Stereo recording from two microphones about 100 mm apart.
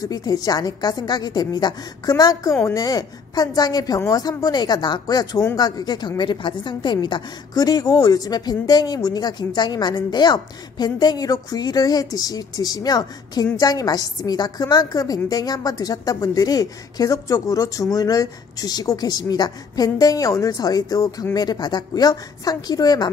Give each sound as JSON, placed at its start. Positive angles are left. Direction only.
{"t": 0.0, "sound": "a woman's voice", "side_deg": 40}